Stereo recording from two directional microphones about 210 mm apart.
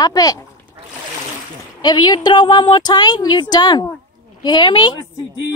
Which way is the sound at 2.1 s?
20° left (ahead or behind).